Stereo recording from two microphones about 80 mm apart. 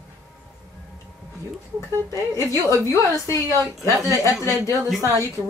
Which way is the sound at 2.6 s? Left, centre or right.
Left.